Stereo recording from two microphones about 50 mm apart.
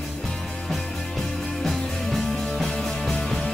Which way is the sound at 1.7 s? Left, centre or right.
Centre.